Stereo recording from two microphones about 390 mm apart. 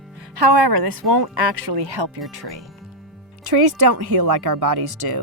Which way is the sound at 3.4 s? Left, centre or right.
Right.